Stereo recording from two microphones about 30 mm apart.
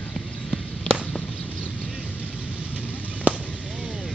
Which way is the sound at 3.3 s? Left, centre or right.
Right.